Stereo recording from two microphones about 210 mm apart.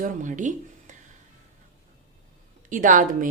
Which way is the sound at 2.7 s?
40° right (ahead or behind).